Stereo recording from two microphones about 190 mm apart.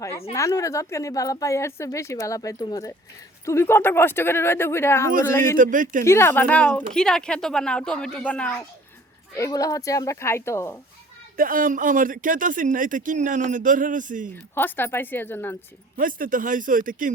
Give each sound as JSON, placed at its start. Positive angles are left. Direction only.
{"t": 0.0, "sound": "a woman's voice", "side_deg": 15}
{"t": 5.5, "sound": "speech", "side_deg": -45}
{"t": 6.1, "sound": "speech", "side_deg": 15}
{"t": 9.3, "sound": "speech", "side_deg": 15}
{"t": 11.3, "sound": "speech", "side_deg": -45}
{"t": 14.5, "sound": "speech", "side_deg": 10}
{"t": 16.0, "sound": "speech", "side_deg": -45}